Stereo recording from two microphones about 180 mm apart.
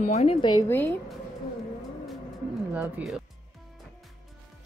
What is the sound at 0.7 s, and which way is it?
Speech, 10° left (ahead or behind).